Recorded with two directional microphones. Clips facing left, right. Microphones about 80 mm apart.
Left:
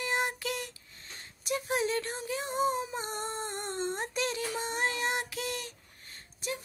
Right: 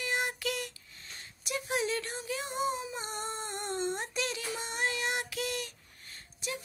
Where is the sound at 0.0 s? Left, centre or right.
Left.